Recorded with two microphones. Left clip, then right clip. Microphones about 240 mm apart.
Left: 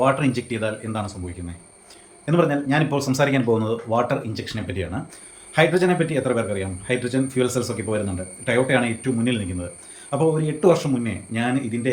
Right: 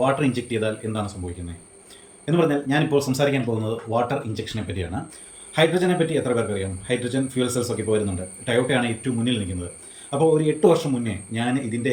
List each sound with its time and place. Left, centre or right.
0.0 s speech: centre
2.2 s speech: centre